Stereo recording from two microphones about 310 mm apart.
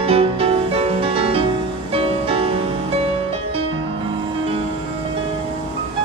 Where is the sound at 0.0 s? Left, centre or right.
Centre.